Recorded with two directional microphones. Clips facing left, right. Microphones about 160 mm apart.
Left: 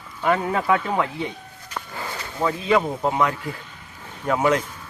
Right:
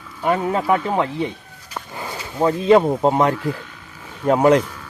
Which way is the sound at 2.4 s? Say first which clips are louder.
Right 7 dB; 35° right (ahead or behind).